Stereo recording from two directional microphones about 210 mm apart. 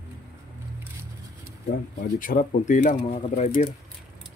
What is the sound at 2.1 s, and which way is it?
Speech, 40° left (ahead or behind).